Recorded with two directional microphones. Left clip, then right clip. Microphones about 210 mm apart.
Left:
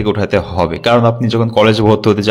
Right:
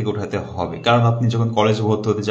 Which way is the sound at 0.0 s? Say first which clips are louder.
Left 10 dB; 40° left (ahead or behind).